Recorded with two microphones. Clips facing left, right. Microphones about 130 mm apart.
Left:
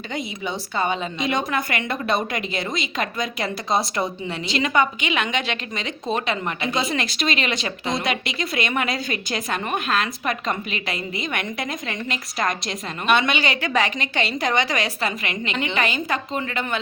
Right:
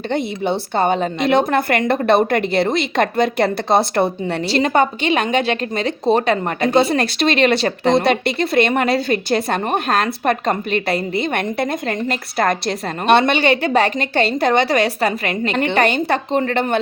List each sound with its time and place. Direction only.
0.1 s a woman's voice: 60° right (ahead or behind)
4.5 s a woman's voice: 35° right (ahead or behind)
11.3 s a woman's voice: 50° right (ahead or behind)
13.1 s a woman's voice: 40° right (ahead or behind)
14.5 s a woman's voice: 50° right (ahead or behind)